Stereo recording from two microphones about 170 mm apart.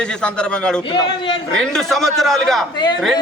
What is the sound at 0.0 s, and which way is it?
A man's voice, 5° left (ahead or behind).